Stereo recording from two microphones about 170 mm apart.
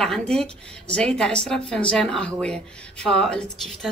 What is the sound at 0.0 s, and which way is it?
Speech, 5° left (ahead or behind).